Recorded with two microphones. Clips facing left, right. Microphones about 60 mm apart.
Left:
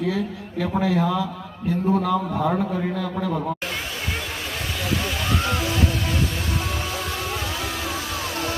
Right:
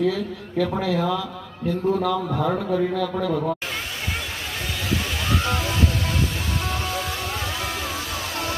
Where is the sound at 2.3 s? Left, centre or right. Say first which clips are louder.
Even; centre.